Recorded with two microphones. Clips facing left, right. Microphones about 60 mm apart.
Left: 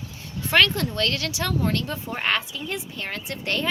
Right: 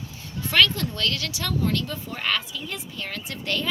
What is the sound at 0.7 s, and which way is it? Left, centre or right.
A child's voice, left.